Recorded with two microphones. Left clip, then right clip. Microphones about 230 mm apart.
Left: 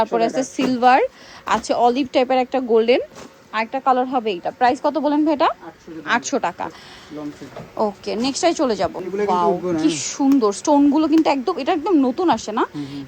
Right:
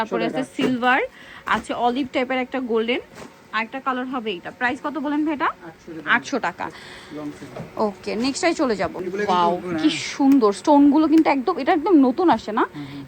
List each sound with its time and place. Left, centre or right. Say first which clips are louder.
0.0 s a woman's voice: left 5 dB; left
7.8 s speech: left 2 dB; centre